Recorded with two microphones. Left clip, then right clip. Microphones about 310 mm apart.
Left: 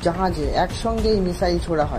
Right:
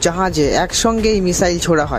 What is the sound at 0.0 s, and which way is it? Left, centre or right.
Speech, right.